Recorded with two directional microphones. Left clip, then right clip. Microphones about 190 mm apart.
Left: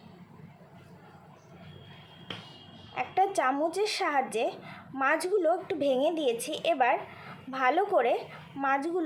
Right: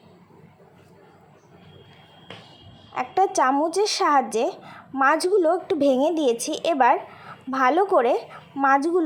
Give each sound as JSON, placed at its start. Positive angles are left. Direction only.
{"t": 2.9, "sound": "speech", "side_deg": -25}